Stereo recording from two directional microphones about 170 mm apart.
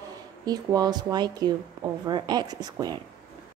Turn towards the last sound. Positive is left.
turn(degrees=-20)  # may be behind; listen again after turning